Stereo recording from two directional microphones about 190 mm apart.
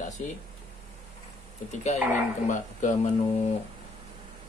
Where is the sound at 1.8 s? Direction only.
40° left (ahead or behind).